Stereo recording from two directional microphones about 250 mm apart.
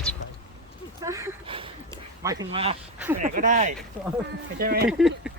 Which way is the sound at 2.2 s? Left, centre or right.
Centre.